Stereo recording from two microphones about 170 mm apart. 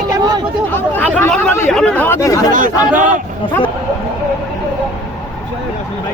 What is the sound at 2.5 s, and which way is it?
Speech, 50° right (ahead or behind).